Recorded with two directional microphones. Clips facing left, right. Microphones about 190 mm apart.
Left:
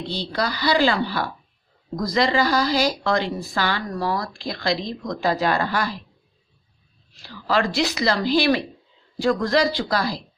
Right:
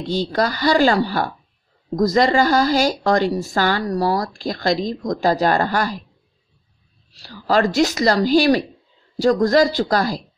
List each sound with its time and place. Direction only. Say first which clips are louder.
0.1 s a woman's voice: right 7 dB; 45° right (ahead or behind)
7.2 s a woman's voice: right 4 dB; 40° right (ahead or behind)